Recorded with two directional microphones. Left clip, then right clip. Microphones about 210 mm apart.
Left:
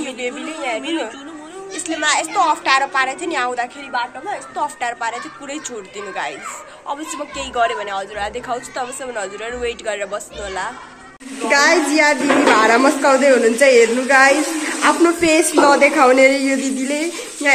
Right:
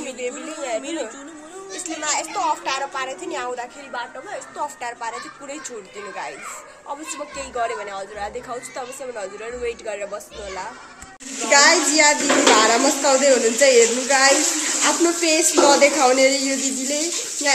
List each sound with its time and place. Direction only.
0.0 s a woman's voice: 5° left (ahead or behind)
2.0 s a woman's voice: 5° left (ahead or behind)
7.3 s a woman's voice: centre (ahead or behind)